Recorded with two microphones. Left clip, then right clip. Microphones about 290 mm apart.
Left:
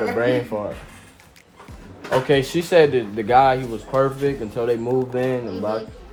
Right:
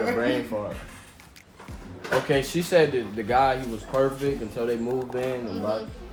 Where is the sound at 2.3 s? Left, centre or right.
Left.